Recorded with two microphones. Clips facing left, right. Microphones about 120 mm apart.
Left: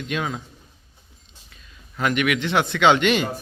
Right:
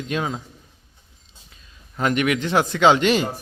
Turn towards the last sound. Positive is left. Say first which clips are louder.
# right 1 dB
turn(degrees=-35)  # may be behind; listen again after turning